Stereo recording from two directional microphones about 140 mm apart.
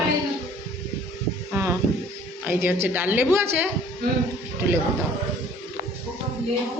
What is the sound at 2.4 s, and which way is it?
A man's voice, 15° right (ahead or behind).